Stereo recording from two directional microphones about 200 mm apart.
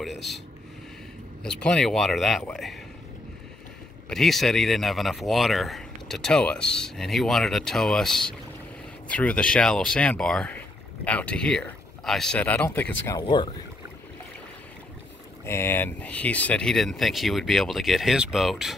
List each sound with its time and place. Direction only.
0.0 s speech: centre (ahead or behind)
1.4 s speech: 5° left (ahead or behind)
4.1 s speech: centre (ahead or behind); by 13.6 s 25° left (ahead or behind)
15.4 s speech: 10° left (ahead or behind)